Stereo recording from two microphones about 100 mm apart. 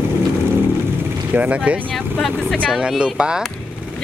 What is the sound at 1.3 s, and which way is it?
Speech, 15° right (ahead or behind).